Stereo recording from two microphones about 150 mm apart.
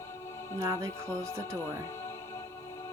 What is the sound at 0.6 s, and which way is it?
Speech, 20° right (ahead or behind).